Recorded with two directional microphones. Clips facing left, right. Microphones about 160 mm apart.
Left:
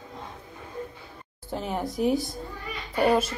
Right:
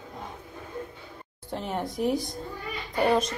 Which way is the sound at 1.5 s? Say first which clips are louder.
Left 1 dB; centre (ahead or behind).